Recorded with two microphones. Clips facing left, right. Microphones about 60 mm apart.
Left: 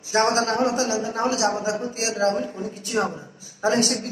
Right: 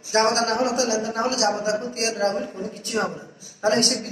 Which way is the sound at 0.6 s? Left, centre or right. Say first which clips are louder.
Even; left.